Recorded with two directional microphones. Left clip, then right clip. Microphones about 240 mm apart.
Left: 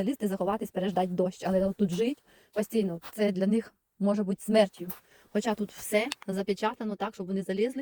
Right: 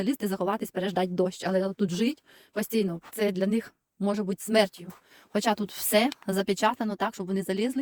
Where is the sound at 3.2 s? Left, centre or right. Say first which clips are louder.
Right 1 dB; centre.